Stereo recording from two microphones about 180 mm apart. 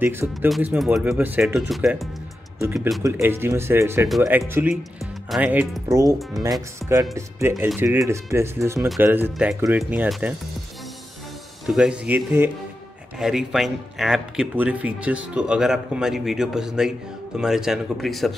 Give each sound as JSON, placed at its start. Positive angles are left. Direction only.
{"t": 0.0, "sound": "speech", "side_deg": -10}
{"t": 0.7, "sound": "speech", "side_deg": 0}
{"t": 3.0, "sound": "speech", "side_deg": -15}
{"t": 11.6, "sound": "speech", "side_deg": -5}